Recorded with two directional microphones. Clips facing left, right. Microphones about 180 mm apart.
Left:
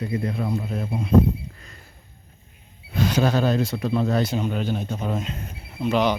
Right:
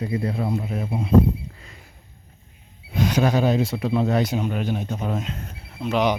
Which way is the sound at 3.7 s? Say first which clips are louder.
Right 1 dB; 20° right (ahead or behind).